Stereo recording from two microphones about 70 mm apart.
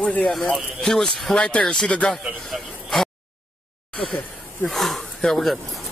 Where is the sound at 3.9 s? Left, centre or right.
Centre.